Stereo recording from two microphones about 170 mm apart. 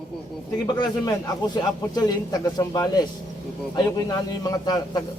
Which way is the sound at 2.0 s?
25° left (ahead or behind).